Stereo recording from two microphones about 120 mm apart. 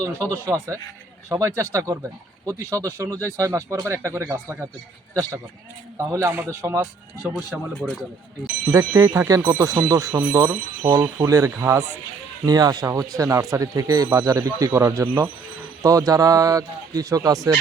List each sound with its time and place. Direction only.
0.0 s speech: 25° right (ahead or behind)
6.0 s speech: 25° right (ahead or behind)
7.7 s speech: 10° left (ahead or behind)
9.0 s speech: 30° right (ahead or behind)
12.5 s speech: 35° right (ahead or behind)